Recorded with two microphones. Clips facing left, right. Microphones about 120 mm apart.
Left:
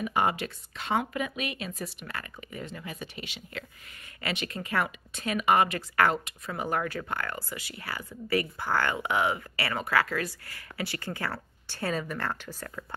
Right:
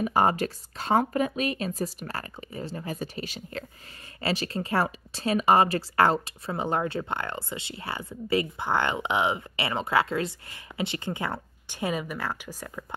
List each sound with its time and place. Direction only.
0.0 s speech: 40° right (ahead or behind); by 12.8 s 15° right (ahead or behind)